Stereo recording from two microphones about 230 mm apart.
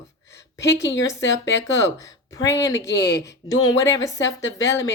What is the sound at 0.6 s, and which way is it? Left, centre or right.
Speech, left.